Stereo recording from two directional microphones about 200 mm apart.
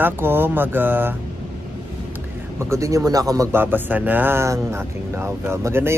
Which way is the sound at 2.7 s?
15° right (ahead or behind).